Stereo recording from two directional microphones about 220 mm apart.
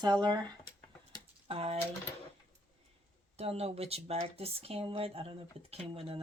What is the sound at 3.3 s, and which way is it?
Speech, 25° right (ahead or behind).